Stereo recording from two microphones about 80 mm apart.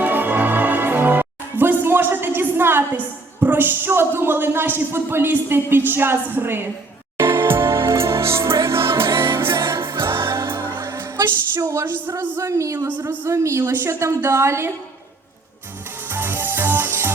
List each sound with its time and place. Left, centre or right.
0.0 s music: right
3.4 s speech: right
7.2 s music: right
11.6 s a woman's voice: right
16.0 s music: right